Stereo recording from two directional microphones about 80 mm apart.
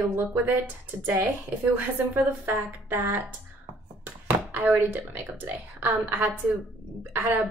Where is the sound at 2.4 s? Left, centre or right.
Right.